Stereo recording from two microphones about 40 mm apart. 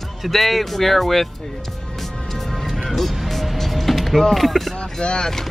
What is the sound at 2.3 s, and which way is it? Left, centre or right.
Music, centre.